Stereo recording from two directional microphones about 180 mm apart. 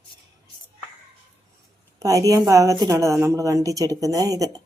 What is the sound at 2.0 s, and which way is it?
A woman's voice, 20° right (ahead or behind).